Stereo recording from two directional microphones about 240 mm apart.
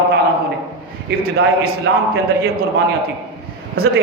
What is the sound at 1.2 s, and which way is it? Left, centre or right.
Speech, right.